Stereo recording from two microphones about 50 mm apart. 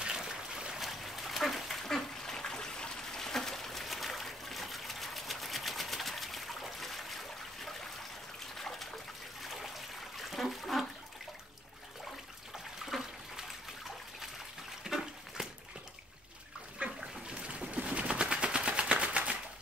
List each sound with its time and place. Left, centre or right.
0.0 s a sound: centre
0.7 s duck: centre
8.5 s water: centre
9.4 s trickle: centre
12.8 s water: centre
14.8 s toilet flush: centre
16.8 s water: right
17.3 s a sound: right